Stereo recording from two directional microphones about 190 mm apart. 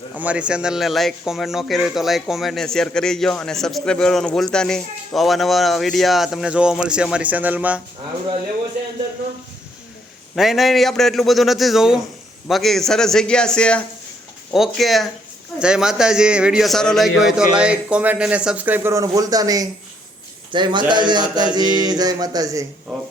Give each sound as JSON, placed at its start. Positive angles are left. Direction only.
{"t": 0.2, "sound": "speech", "side_deg": -5}
{"t": 10.3, "sound": "speech", "side_deg": 0}
{"t": 20.5, "sound": "a sound", "side_deg": -25}